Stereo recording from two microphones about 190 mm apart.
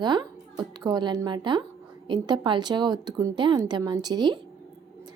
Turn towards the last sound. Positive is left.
turn(degrees=-20)  # may be behind; listen again after turning